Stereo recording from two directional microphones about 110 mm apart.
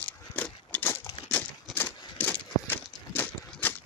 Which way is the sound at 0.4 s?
15° left (ahead or behind).